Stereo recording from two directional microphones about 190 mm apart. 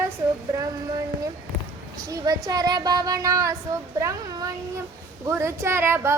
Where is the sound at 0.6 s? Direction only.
20° right (ahead or behind).